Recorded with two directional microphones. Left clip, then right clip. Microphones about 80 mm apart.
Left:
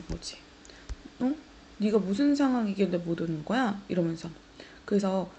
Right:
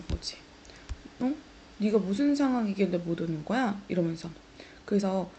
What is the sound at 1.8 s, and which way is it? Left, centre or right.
A woman's voice, left.